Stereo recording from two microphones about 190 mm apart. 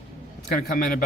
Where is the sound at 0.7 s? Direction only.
50° left (ahead or behind).